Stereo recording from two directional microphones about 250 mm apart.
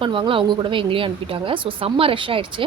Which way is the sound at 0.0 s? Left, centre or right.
Centre.